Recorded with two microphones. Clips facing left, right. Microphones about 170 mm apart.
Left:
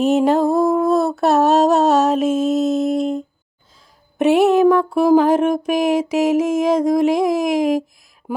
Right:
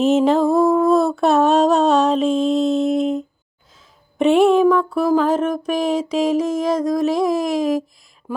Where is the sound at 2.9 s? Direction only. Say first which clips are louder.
Right 1 dB; 35° left (ahead or behind).